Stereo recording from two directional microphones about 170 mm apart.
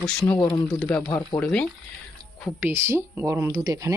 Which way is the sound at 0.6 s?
Centre (ahead or behind).